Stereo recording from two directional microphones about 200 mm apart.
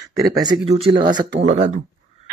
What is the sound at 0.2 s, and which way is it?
Speech, 20° right (ahead or behind).